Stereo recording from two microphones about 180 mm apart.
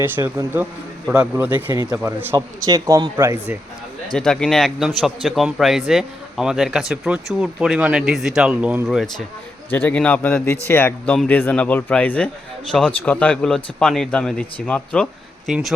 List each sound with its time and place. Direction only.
0.0 s a man's voice: 15° right (ahead or behind)
2.6 s a man's voice: 20° right (ahead or behind)
4.1 s speech: 5° left (ahead or behind)
9.6 s speech: 10° left (ahead or behind)